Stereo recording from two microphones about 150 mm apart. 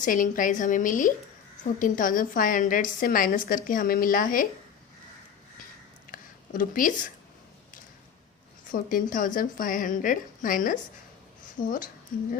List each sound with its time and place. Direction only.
0.0 s a woman's voice: 60° left (ahead or behind)
6.1 s a sound: 65° left (ahead or behind)
8.7 s a woman's voice: 65° left (ahead or behind)